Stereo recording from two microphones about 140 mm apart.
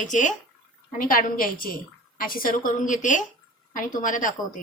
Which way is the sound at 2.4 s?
80° left.